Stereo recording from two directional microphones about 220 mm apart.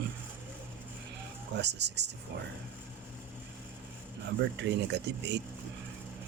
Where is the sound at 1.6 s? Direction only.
50° right (ahead or behind).